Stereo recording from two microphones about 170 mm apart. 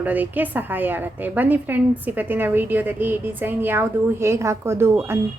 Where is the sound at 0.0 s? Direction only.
10° right (ahead or behind).